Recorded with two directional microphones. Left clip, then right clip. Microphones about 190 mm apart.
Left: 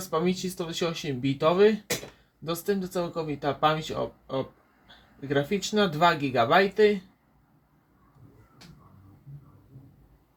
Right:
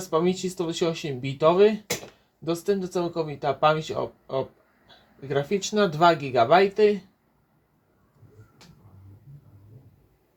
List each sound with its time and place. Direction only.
0.1 s speech: 30° right (ahead or behind)